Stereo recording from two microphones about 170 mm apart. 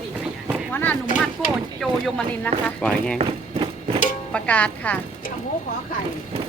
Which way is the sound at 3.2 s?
30° right (ahead or behind).